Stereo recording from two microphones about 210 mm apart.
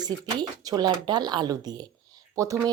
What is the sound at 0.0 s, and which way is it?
Speech, 20° right (ahead or behind).